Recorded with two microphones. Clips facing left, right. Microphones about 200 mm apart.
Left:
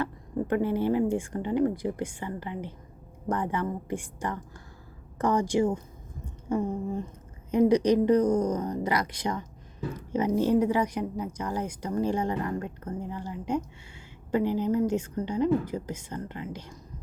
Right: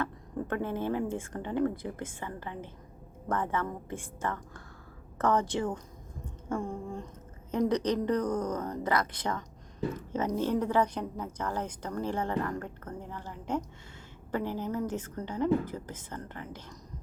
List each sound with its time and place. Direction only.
0.0 s speech: 15° left (ahead or behind)